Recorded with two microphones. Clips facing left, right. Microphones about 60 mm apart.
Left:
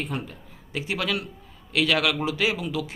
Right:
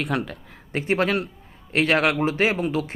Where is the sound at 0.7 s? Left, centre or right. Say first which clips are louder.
Right 6 dB; right.